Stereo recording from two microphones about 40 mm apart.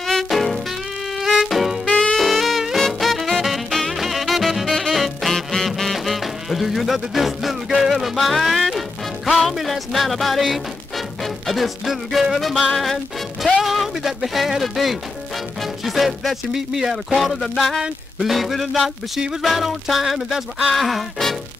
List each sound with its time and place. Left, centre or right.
0.0 s music: centre
1.9 s saxophone: left
2.1 s music: centre
13.6 s a sound: centre
15.6 s music: centre
16.5 s a sound: centre